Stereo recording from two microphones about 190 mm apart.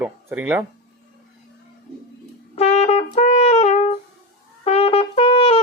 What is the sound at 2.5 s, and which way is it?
Brass instrument, 35° left (ahead or behind).